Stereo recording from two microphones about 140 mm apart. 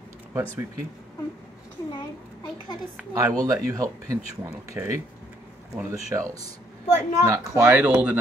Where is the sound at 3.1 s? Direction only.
25° right (ahead or behind).